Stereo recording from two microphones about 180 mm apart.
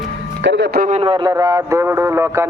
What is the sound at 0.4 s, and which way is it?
Speech, 75° right (ahead or behind).